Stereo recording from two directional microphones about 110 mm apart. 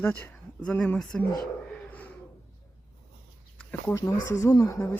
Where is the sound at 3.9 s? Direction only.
25° left (ahead or behind).